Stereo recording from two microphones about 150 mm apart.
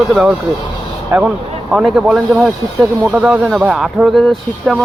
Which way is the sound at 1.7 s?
5° right (ahead or behind).